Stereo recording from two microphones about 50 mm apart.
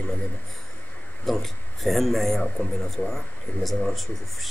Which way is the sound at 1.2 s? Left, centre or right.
Centre.